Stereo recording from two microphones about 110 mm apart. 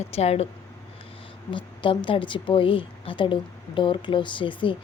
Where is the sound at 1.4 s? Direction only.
50° left (ahead or behind).